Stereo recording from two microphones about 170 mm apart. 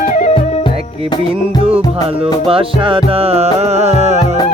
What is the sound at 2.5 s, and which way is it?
Music, 30° right (ahead or behind).